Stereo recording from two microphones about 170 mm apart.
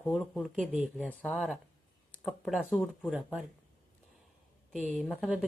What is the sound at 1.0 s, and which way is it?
A woman's voice, 10° left (ahead or behind).